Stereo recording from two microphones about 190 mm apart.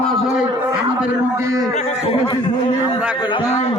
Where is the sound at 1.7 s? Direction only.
35° left (ahead or behind).